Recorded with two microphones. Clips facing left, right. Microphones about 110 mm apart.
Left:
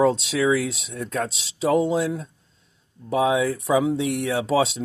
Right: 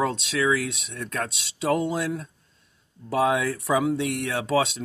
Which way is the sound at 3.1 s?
25° left (ahead or behind).